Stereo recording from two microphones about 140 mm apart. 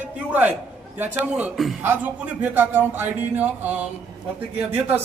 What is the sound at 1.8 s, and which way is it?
A man's voice, 15° right (ahead or behind).